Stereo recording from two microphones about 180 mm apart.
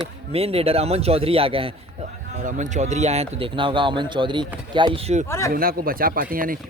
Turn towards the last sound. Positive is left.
turn(degrees=-50)  # may be behind; listen again after turning